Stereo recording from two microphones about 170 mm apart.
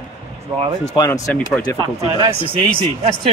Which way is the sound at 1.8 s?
30° right (ahead or behind).